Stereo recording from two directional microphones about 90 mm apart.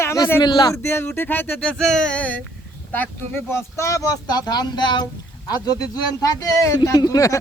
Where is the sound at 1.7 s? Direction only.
5° left (ahead or behind).